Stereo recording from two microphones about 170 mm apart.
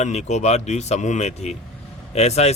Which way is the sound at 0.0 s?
40° left (ahead or behind).